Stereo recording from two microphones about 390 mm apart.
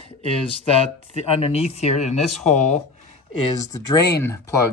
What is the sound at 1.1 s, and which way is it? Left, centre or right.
Speech, centre.